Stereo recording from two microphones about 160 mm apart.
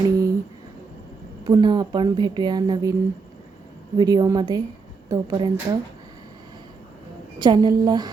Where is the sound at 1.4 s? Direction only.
30° right (ahead or behind).